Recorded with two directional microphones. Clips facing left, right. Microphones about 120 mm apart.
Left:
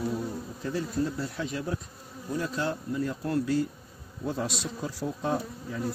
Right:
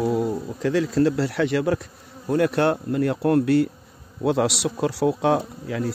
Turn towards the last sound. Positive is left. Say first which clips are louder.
# right 7 dB
turn(degrees=-80)